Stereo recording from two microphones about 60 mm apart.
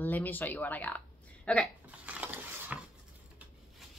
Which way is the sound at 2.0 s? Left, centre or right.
Right.